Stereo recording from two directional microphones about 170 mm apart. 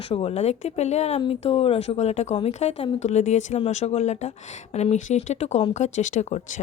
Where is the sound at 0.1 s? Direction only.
35° left (ahead or behind).